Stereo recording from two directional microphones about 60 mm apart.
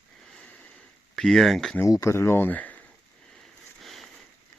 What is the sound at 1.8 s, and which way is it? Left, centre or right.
Speech, left.